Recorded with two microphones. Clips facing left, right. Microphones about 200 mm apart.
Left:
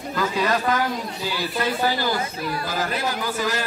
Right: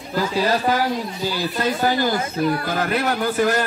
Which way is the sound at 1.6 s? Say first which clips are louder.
Right 3 dB; 45° right (ahead or behind).